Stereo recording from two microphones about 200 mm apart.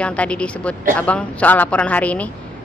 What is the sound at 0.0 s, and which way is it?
A woman's voice, 5° left (ahead or behind).